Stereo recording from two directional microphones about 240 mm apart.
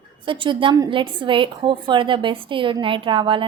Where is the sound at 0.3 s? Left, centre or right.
Right.